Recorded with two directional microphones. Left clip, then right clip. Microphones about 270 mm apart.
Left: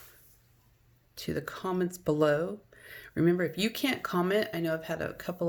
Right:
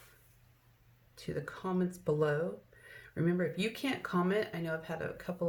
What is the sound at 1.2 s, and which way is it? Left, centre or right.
Speech, left.